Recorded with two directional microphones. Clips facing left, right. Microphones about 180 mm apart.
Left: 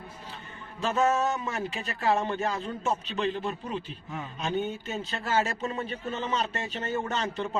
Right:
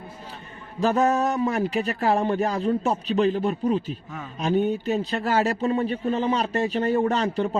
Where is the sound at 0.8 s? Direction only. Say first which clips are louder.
Right 5 dB; 35° right (ahead or behind).